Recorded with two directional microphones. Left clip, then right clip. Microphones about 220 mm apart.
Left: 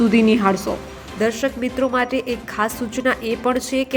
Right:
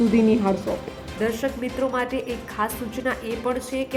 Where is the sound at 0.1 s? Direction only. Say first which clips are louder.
Left 4 dB; 10° left (ahead or behind).